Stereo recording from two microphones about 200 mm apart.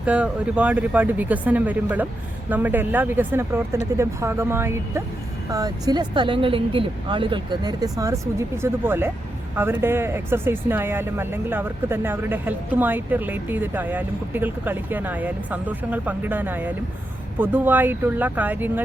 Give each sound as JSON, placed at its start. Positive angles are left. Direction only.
{"t": 0.0, "sound": "speech", "side_deg": -5}